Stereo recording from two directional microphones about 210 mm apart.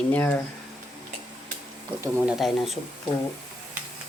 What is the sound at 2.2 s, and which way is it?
Speech, centre (ahead or behind).